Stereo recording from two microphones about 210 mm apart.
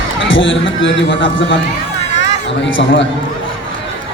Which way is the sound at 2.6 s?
60° left (ahead or behind).